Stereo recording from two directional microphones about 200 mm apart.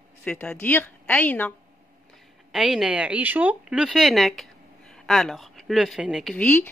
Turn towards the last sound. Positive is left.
turn(degrees=5)  # may be behind; listen again after turning